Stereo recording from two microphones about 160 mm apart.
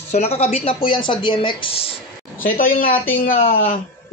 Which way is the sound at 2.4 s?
60° left (ahead or behind).